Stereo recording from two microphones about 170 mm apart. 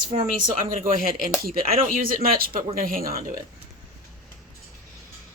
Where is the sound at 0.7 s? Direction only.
55° right (ahead or behind).